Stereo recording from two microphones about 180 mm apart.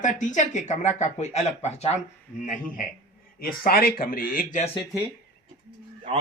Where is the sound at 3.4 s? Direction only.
55° left (ahead or behind).